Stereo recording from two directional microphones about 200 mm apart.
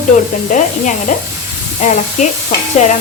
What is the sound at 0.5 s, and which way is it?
Speech, 40° left (ahead or behind).